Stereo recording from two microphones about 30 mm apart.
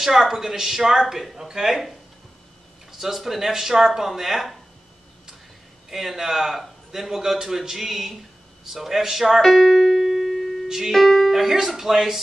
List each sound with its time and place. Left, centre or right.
0.0 s a man's voice: centre
5.9 s a man's voice: centre
9.4 s speech: centre
10.0 s music: centre
10.9 s speech: centre
11.3 s a man's voice: centre